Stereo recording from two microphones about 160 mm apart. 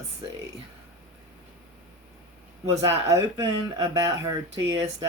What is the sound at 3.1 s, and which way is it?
Speech, 20° right (ahead or behind).